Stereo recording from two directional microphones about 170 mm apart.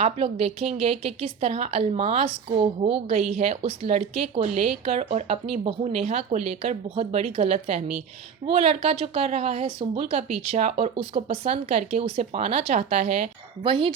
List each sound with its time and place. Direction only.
0.0 s a woman's voice: 40° right (ahead or behind)